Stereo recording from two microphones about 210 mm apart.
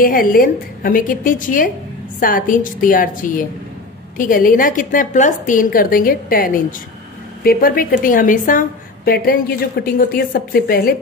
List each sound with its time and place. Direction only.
0.0 s a woman's voice: 40° left (ahead or behind)